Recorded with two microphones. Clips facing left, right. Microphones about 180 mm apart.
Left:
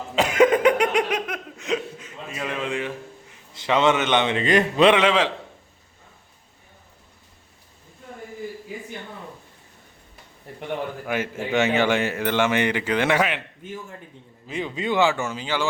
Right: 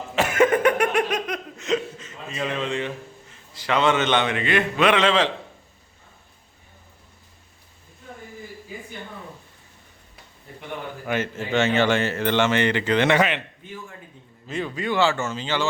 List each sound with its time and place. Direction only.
0.2 s a sound: 15° left (ahead or behind)
1.3 s chuckle: 10° left (ahead or behind)
3.5 s a man's voice: 20° left (ahead or behind)
4.4 s speech: 35° left (ahead or behind)
4.9 s speech: 10° left (ahead or behind)
11.0 s speech: 10° left (ahead or behind)
14.4 s speech: 15° left (ahead or behind)